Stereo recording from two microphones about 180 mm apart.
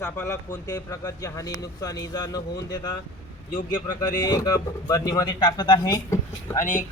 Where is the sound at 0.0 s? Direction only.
15° left (ahead or behind).